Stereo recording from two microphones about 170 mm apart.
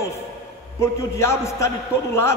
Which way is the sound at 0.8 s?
15° left (ahead or behind).